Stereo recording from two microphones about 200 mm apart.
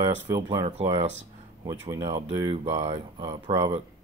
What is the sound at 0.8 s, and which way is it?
Speech, 30° right (ahead or behind).